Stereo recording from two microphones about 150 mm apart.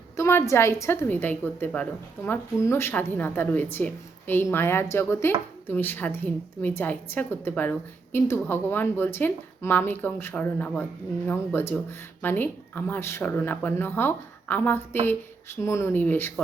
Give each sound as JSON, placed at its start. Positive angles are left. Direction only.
{"t": 0.2, "sound": "a woman's voice", "side_deg": 15}